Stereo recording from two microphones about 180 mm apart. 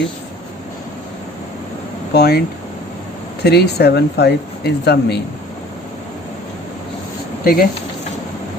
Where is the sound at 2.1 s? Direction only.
60° left (ahead or behind).